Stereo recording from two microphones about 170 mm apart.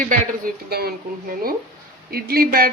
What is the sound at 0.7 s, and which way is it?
Speech, 65° right (ahead or behind).